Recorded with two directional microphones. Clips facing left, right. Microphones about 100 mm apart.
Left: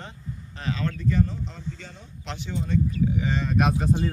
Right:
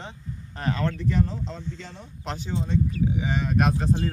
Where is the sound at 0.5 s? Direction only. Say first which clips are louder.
Right 2 dB; 50° right (ahead or behind).